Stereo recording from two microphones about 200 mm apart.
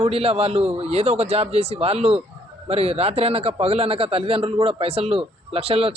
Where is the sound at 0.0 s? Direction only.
30° right (ahead or behind).